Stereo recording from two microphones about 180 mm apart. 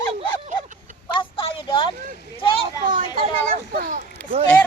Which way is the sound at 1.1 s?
30° left (ahead or behind).